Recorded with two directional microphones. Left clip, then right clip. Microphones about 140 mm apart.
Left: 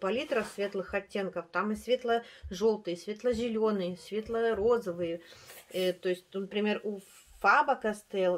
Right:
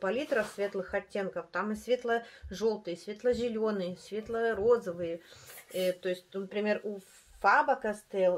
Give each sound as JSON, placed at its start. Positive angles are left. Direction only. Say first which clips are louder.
{"t": 0.0, "sound": "speech", "louder": "even", "side_deg": 20}
{"t": 2.5, "sound": "speech", "louder": "left 3 dB", "side_deg": 25}